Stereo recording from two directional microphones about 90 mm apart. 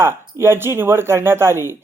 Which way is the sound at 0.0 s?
30° right (ahead or behind).